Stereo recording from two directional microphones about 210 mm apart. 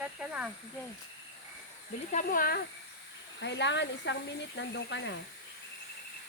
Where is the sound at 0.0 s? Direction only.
5° right (ahead or behind).